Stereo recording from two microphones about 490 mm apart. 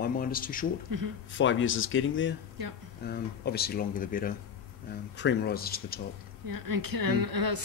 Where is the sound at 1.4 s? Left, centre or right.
Left.